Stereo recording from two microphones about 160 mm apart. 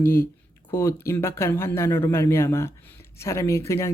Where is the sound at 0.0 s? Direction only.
15° left (ahead or behind).